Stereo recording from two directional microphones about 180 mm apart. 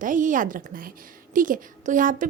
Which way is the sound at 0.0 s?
45° right (ahead or behind).